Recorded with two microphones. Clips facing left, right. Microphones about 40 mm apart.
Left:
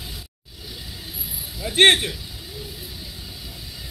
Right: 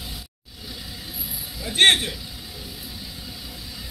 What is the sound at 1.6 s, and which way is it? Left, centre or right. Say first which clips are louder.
Speech: left 2 dB; left.